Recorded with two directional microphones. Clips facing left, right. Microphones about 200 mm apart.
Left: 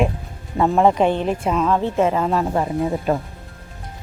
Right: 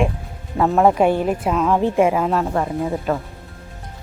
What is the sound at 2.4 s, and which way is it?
Speech, 10° left (ahead or behind).